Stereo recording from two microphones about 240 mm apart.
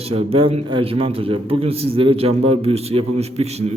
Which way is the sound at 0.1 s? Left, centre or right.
Right.